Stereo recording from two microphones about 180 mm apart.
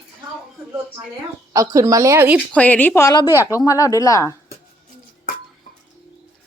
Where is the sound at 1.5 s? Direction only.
20° right (ahead or behind).